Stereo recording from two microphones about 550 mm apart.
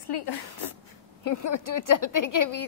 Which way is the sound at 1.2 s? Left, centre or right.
Left.